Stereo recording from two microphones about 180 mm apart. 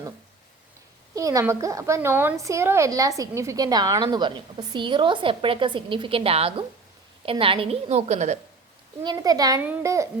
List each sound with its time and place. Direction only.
1.1 s a woman's voice: 20° right (ahead or behind); by 8.4 s 40° right (ahead or behind)
9.0 s a woman's voice: 20° right (ahead or behind)